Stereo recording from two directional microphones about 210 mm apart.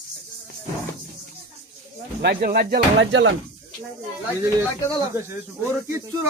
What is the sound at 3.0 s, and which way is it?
Speech, 65° right (ahead or behind).